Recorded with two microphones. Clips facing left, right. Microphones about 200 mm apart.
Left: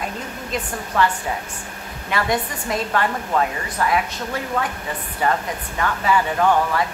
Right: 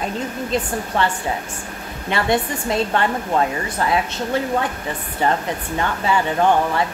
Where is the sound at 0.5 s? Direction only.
30° right (ahead or behind).